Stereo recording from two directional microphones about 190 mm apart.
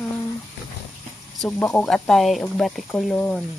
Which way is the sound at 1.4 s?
5° left (ahead or behind).